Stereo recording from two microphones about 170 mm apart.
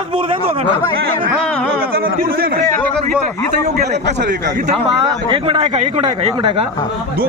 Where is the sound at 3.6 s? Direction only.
45° right (ahead or behind).